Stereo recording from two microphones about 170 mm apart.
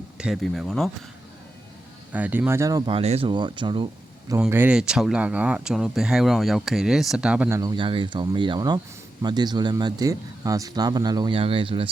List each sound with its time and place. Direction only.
0.2 s speech: centre (ahead or behind)
2.1 s speech: 10° right (ahead or behind)
2.9 s speech: 35° right (ahead or behind)
4.4 s speech: 10° right (ahead or behind)
7.6 s speech: 25° right (ahead or behind)